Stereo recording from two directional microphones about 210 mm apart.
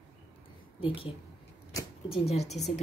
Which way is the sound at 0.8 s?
25° left (ahead or behind).